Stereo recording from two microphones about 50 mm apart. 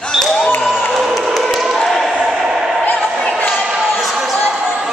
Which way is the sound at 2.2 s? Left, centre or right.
Centre.